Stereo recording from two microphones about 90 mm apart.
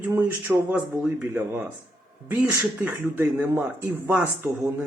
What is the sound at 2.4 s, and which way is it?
Speech, 20° right (ahead or behind).